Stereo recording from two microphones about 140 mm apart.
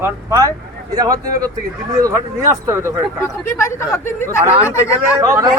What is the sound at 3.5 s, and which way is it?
Speech, 20° left (ahead or behind).